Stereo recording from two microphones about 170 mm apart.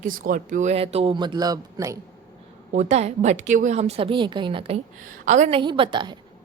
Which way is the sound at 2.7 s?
40° right (ahead or behind).